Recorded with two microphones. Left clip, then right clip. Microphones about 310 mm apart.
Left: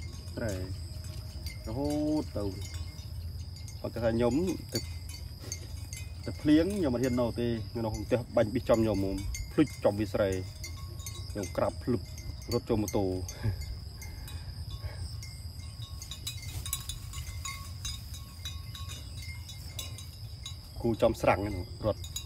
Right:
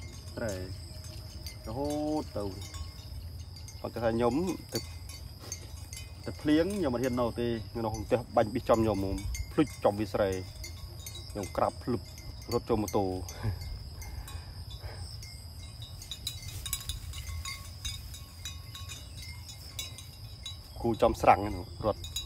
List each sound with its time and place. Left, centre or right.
0.3 s speech: centre
2.0 s speech: centre
3.8 s speech: centre
6.2 s speech: centre
16.7 s cowbell: centre
20.8 s speech: centre
22.2 s wind chime: centre